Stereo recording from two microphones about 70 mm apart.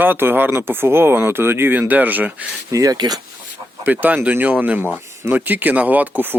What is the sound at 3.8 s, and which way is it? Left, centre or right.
Speech, right.